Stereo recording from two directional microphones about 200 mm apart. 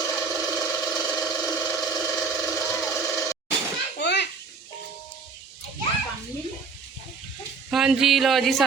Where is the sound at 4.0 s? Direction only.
60° left (ahead or behind).